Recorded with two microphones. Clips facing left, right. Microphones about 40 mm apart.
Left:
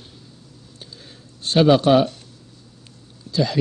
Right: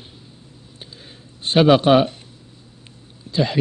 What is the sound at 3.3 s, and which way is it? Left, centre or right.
Speech, right.